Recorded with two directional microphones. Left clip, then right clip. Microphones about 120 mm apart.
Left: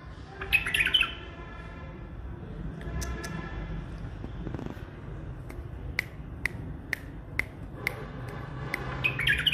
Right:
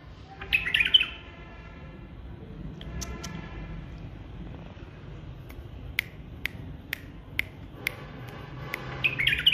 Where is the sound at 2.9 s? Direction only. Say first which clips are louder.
Left 1 dB; 30° right (ahead or behind).